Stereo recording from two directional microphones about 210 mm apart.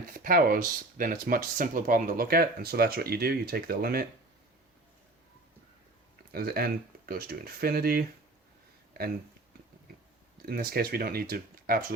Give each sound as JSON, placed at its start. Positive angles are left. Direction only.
{"t": 0.1, "sound": "speech", "side_deg": -40}
{"t": 6.3, "sound": "speech", "side_deg": -45}
{"t": 10.4, "sound": "speech", "side_deg": -45}